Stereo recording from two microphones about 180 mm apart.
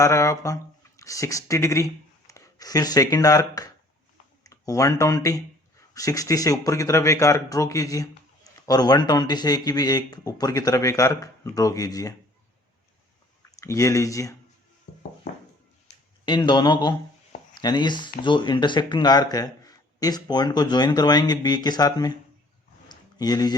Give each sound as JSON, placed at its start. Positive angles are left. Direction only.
{"t": 0.0, "sound": "speech", "side_deg": 15}
{"t": 13.6, "sound": "speech", "side_deg": 15}
{"t": 16.2, "sound": "speech", "side_deg": 25}
{"t": 22.9, "sound": "a sound", "side_deg": 20}